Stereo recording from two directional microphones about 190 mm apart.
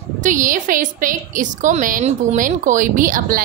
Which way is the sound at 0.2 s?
45° right (ahead or behind).